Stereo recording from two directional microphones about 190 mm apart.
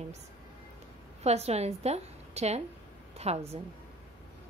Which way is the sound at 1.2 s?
35° right (ahead or behind).